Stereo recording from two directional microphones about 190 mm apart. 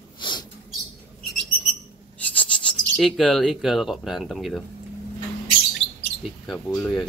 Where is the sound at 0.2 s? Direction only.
25° left (ahead or behind).